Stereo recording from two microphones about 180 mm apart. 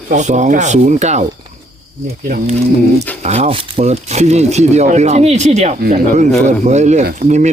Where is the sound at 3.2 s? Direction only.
35° right (ahead or behind).